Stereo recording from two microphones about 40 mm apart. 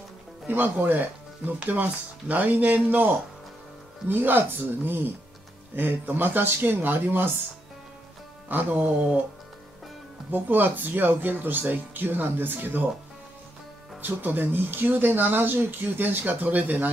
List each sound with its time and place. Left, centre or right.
0.5 s speech: right
1.7 s speech: right
4.1 s speech: right
8.5 s speech: right
10.3 s speech: right
14.0 s speech: right